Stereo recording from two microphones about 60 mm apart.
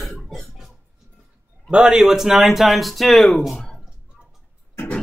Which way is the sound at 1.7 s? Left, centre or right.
Centre.